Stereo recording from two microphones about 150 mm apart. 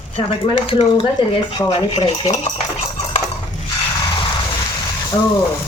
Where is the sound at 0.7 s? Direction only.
40° left (ahead or behind).